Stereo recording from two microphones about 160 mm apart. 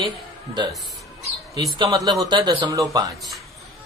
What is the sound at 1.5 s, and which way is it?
A man's voice, 25° right (ahead or behind).